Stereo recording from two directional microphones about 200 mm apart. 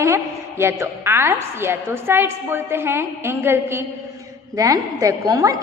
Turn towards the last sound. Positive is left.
turn(degrees=-15)  # may be behind; listen again after turning